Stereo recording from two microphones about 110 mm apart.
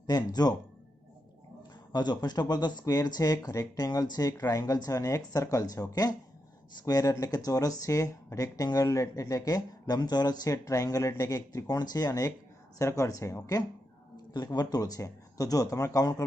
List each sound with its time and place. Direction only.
0.3 s speech: 40° left (ahead or behind)
1.9 s speech: 40° left (ahead or behind)